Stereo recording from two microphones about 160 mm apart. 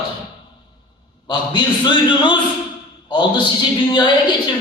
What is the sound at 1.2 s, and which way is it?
A man's voice, 30° left (ahead or behind).